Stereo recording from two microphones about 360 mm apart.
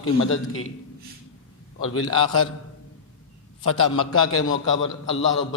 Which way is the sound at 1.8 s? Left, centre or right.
Left.